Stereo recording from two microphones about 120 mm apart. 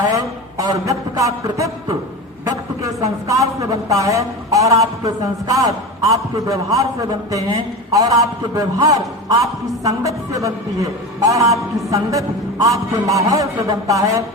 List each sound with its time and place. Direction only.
0.1 s a man's voice: 30° right (ahead or behind)
7.9 s a man's voice: 30° right (ahead or behind)